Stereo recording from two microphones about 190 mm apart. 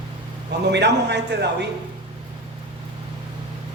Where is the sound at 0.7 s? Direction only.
65° right (ahead or behind).